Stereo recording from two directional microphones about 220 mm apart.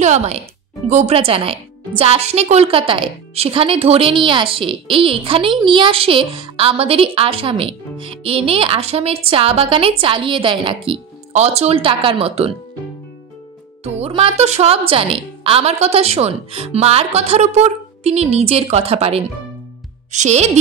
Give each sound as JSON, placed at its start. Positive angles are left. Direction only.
{"t": 0.0, "sound": "speech", "side_deg": -30}
{"t": 13.8, "sound": "speech", "side_deg": -30}